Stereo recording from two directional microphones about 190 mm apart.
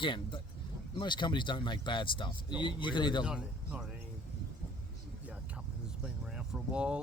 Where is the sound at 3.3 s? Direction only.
5° right (ahead or behind).